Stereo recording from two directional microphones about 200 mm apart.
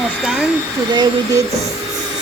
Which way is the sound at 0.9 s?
20° right (ahead or behind).